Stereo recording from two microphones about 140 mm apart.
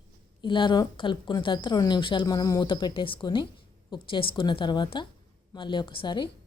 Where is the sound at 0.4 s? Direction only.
35° left (ahead or behind).